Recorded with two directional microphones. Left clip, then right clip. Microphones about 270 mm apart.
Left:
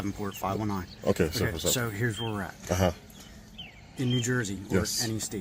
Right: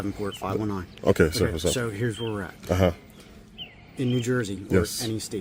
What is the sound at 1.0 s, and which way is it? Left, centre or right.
Speech, right.